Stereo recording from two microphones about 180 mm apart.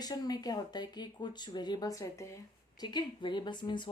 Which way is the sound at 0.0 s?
20° left (ahead or behind).